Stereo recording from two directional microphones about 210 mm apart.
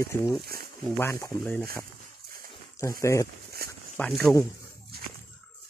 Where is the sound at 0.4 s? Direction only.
45° right (ahead or behind).